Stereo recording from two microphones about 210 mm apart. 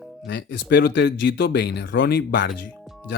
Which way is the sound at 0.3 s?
55° left (ahead or behind).